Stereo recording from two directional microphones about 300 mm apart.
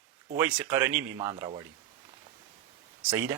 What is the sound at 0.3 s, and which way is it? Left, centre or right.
Speech, centre.